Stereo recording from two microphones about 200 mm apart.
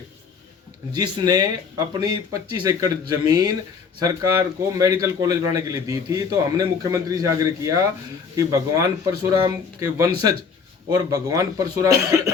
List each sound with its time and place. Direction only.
0.9 s a man's voice: 20° right (ahead or behind)